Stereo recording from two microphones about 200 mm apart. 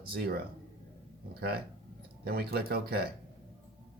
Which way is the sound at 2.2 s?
50° right (ahead or behind).